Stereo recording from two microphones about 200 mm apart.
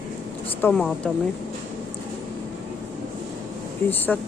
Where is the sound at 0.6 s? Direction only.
5° left (ahead or behind).